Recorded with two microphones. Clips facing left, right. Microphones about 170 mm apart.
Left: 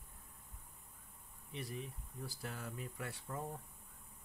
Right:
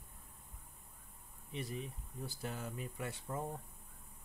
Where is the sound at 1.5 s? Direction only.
20° right (ahead or behind).